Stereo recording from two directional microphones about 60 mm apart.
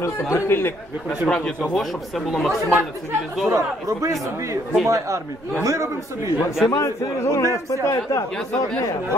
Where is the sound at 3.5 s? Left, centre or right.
Right.